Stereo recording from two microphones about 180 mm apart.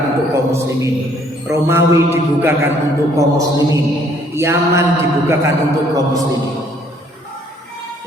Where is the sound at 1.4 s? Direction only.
15° right (ahead or behind).